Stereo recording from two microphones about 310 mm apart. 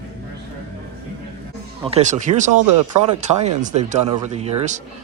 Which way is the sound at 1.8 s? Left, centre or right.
Right.